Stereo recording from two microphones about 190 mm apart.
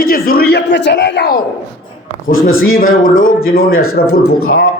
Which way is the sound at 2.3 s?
90° left.